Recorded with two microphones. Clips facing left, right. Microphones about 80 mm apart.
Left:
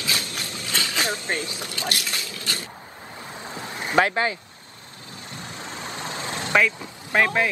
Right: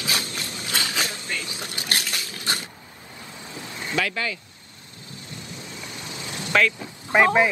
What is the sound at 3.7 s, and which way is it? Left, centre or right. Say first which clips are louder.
Speech: left 6 dB; left.